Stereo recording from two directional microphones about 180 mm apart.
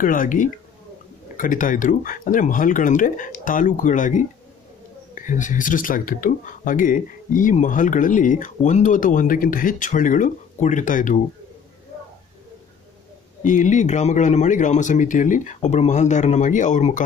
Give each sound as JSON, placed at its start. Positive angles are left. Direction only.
{"t": 0.0, "sound": "speech", "side_deg": 50}
{"t": 13.4, "sound": "speech", "side_deg": 45}